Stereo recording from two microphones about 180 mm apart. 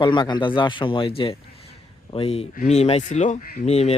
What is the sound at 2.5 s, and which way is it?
Speech, 40° left (ahead or behind).